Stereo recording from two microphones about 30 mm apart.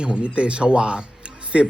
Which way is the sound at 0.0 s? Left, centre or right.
Right.